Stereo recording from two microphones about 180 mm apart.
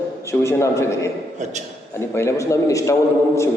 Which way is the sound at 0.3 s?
15° left (ahead or behind).